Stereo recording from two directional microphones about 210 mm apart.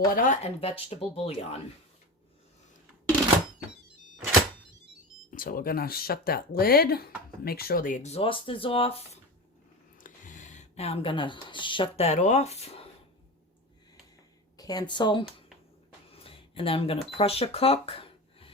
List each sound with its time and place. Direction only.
0.1 s speech: 40° left (ahead or behind)
5.3 s speech: 40° left (ahead or behind)
14.5 s speech: 20° left (ahead or behind)
16.1 s cash register: 25° left (ahead or behind)